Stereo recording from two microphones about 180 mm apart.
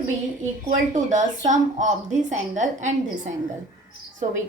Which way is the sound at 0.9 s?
40° right (ahead or behind).